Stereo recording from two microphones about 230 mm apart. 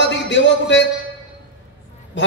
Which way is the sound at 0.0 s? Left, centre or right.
Left.